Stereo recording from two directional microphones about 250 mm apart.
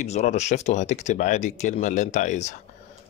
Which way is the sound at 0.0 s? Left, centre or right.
Left.